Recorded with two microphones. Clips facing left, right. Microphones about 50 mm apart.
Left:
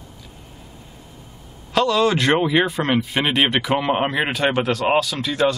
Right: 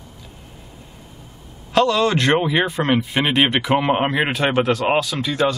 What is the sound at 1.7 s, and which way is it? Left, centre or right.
Speech, centre.